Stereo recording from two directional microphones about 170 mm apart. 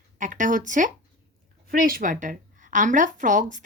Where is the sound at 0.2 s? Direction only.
50° right (ahead or behind).